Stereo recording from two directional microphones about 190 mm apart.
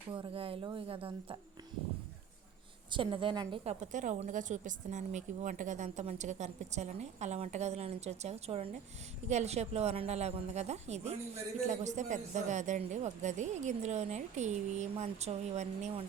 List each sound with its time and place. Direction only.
0.1 s a woman's voice: 30° right (ahead or behind)
2.9 s a woman's voice: 25° right (ahead or behind)
3.6 s a woman's voice: 35° right (ahead or behind)